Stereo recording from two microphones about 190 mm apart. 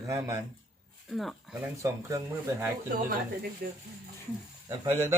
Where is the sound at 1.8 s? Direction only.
15° right (ahead or behind).